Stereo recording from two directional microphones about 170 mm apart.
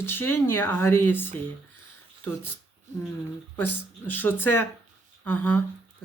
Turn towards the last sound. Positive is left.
turn(degrees=10)  # may be behind; listen again after turning